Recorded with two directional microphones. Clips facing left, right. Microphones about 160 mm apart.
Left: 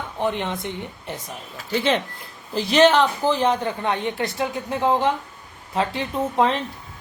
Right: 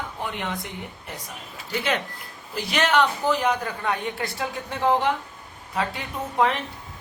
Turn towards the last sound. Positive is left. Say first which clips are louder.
# left 3 dB
turn(degrees=25)  # may be behind; listen again after turning